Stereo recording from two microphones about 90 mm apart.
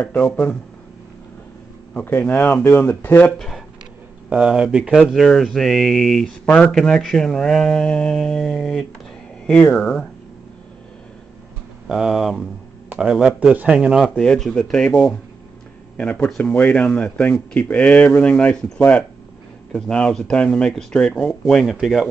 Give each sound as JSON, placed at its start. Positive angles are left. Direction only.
{"t": 0.0, "sound": "speech", "side_deg": 15}
{"t": 2.0, "sound": "speech", "side_deg": 20}
{"t": 3.3, "sound": "speech", "side_deg": 0}
{"t": 4.3, "sound": "speech", "side_deg": -10}
{"t": 4.9, "sound": "speech", "side_deg": 0}
{"t": 11.9, "sound": "speech", "side_deg": -5}
{"t": 14.2, "sound": "speech", "side_deg": 10}